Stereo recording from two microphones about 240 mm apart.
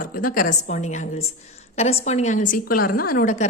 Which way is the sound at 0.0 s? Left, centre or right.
Left.